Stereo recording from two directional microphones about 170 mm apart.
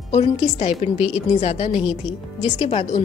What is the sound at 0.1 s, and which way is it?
A woman's voice, 40° left (ahead or behind).